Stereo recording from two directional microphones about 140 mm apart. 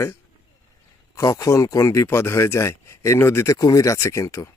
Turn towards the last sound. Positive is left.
turn(degrees=20)  # may be behind; listen again after turning